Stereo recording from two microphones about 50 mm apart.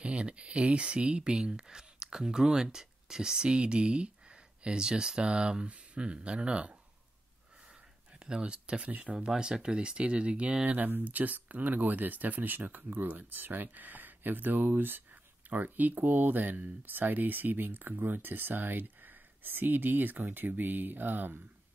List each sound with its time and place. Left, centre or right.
0.0 s speech: right
8.2 s speech: centre; by 21.4 s right